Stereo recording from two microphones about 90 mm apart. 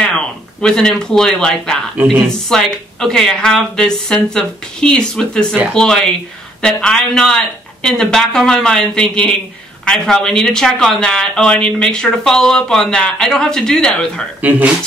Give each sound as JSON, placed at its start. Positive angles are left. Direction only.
{"t": 0.0, "sound": "speech", "side_deg": 10}
{"t": 14.4, "sound": "speech", "side_deg": -15}